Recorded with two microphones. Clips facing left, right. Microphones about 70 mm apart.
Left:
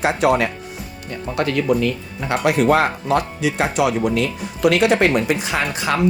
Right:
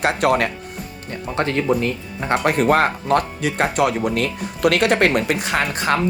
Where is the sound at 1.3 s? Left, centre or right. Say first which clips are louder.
Left 1 dB; right.